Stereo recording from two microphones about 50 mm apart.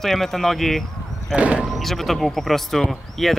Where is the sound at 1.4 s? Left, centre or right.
Right.